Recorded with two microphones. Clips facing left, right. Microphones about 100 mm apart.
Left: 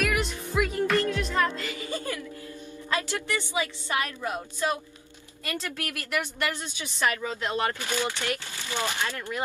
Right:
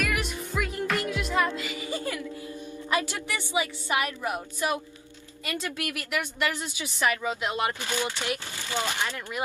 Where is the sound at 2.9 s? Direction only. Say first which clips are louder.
Even; 15° right (ahead or behind).